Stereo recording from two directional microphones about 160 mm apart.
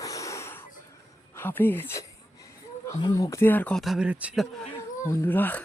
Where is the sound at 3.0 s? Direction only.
25° left (ahead or behind); by 4.4 s 10° right (ahead or behind).